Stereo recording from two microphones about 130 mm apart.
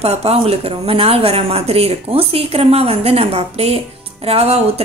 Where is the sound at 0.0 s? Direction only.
50° right (ahead or behind).